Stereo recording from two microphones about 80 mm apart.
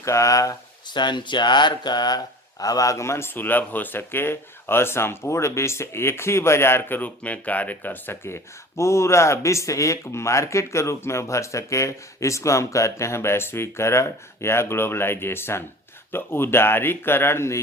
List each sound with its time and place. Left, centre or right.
0.0 s speech: left
0.9 s speech: left